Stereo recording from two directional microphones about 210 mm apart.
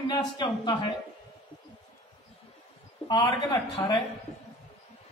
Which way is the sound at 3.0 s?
20° left (ahead or behind).